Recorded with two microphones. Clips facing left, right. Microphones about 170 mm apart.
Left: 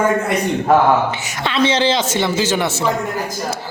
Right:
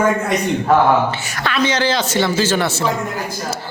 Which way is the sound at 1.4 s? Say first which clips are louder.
Left 2 dB; 25° left (ahead or behind).